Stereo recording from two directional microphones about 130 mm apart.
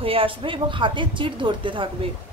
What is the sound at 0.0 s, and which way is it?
Speech, 45° right (ahead or behind).